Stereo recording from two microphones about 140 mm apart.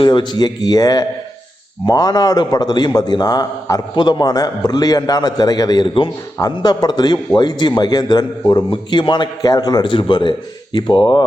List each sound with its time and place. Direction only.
0.0 s a man's voice: 30° left (ahead or behind)